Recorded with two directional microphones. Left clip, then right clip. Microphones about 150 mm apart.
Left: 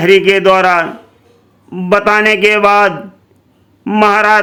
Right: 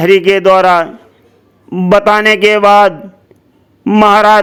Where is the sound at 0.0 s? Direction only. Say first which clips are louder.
Even; 40° right (ahead or behind).